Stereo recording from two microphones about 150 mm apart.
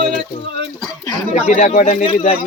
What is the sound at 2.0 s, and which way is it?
Speech, 40° left (ahead or behind).